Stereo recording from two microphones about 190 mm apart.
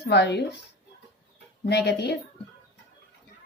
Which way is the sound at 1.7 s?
60° left (ahead or behind).